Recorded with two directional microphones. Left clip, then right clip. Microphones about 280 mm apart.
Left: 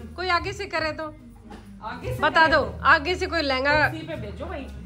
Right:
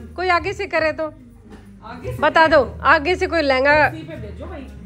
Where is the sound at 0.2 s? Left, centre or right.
Centre.